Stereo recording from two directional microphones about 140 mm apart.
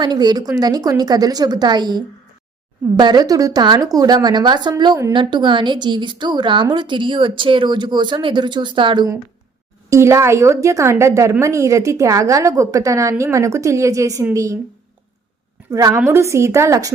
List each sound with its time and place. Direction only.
0.0 s speech: 30° right (ahead or behind)
9.9 s speech: 20° right (ahead or behind)
15.7 s speech: 25° right (ahead or behind)